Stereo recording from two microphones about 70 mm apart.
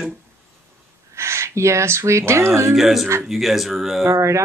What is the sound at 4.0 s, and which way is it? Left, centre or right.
Speech, right.